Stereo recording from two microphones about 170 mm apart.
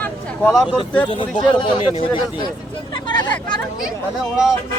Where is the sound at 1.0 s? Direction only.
30° left (ahead or behind).